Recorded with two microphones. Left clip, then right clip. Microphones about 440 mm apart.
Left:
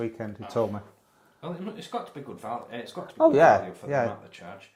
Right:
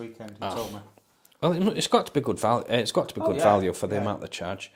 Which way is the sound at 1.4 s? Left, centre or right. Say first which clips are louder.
Right 13 dB; right.